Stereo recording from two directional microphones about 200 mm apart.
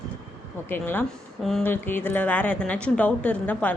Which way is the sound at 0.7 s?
10° left (ahead or behind).